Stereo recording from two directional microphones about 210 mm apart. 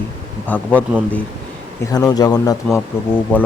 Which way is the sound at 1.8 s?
20° left (ahead or behind).